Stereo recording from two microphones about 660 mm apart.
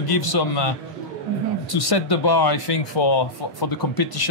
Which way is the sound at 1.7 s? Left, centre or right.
Left.